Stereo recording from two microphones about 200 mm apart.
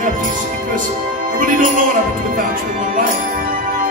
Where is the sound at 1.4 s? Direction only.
40° right (ahead or behind).